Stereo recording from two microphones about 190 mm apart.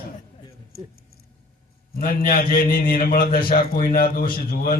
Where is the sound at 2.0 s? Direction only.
50° left (ahead or behind).